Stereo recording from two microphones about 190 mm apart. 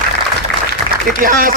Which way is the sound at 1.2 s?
45° right (ahead or behind).